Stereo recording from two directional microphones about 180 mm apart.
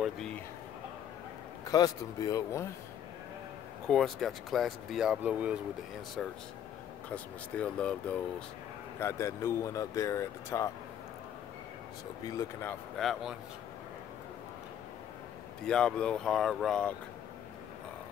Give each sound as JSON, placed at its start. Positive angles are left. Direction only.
{"t": 0.0, "sound": "a sound", "side_deg": 5}
{"t": 1.7, "sound": "speech", "side_deg": 20}
{"t": 3.8, "sound": "speech", "side_deg": 0}
{"t": 7.1, "sound": "speech", "side_deg": 5}
{"t": 12.3, "sound": "speech", "side_deg": 15}
{"t": 12.9, "sound": "speech", "side_deg": 0}
{"t": 15.6, "sound": "speech", "side_deg": 5}